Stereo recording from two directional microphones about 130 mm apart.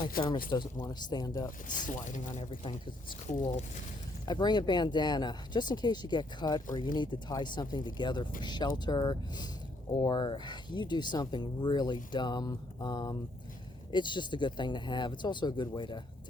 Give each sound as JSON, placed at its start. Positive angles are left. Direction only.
{"t": 0.2, "sound": "speech", "side_deg": 35}
{"t": 1.6, "sound": "speech", "side_deg": 85}
{"t": 2.4, "sound": "speech", "side_deg": 40}
{"t": 3.2, "sound": "speech", "side_deg": 65}
{"t": 4.3, "sound": "speech", "side_deg": 35}